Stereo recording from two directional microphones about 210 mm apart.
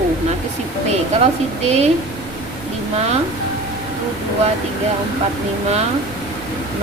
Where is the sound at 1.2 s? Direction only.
30° right (ahead or behind).